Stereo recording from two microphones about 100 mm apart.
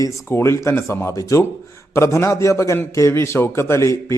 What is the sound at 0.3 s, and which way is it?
A man's voice, 25° left (ahead or behind).